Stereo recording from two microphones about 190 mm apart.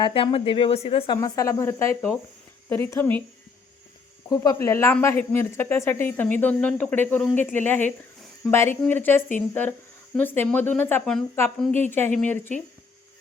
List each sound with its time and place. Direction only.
0.0 s speech: 25° left (ahead or behind); by 3.2 s 10° left (ahead or behind)
4.3 s speech: 15° left (ahead or behind)